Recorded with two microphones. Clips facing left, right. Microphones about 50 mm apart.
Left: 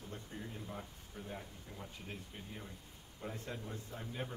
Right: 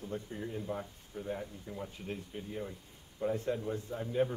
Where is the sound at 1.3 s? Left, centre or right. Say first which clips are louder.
Right 10 dB; centre.